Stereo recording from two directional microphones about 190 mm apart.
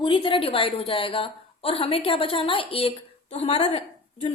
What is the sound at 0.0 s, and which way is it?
Speech, 25° left (ahead or behind).